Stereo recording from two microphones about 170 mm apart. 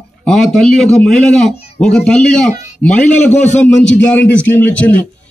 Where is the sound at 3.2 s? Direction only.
40° left (ahead or behind).